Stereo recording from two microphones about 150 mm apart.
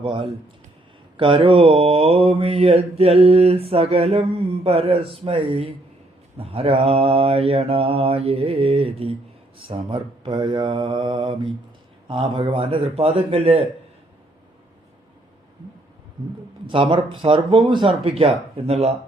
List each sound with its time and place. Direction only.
0.0 s mantra: 35° right (ahead or behind)
16.6 s mantra: 35° right (ahead or behind)